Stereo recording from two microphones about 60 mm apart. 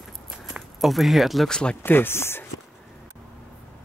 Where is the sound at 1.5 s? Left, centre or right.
Centre.